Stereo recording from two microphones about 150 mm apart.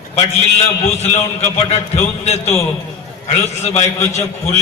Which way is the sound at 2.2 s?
45° left (ahead or behind).